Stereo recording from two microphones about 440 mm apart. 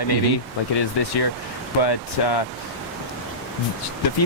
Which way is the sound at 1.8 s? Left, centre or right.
Left.